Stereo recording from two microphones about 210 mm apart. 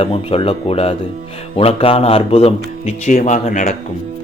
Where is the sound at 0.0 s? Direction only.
25° left (ahead or behind).